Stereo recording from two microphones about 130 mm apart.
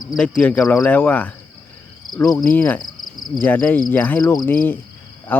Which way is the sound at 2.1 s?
25° left (ahead or behind).